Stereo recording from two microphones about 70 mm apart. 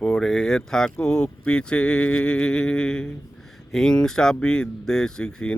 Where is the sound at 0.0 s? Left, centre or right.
Centre.